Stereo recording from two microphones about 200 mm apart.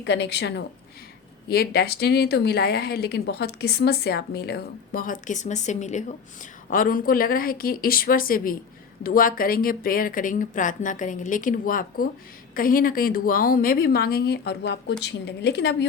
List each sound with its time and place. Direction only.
0.0 s a woman's voice: 60° left (ahead or behind)